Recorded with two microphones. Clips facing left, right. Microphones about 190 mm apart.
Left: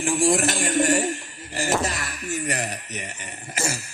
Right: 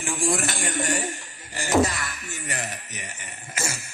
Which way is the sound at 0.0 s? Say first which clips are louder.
Left 5 dB; 35° left (ahead or behind).